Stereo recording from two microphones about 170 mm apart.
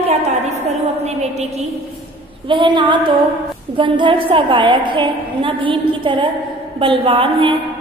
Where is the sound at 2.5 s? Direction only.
30° right (ahead or behind).